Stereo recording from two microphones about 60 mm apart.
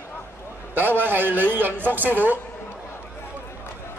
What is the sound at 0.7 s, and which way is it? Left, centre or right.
A man's voice, right.